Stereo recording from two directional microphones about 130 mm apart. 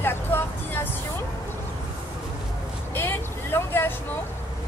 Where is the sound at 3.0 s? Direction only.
15° left (ahead or behind).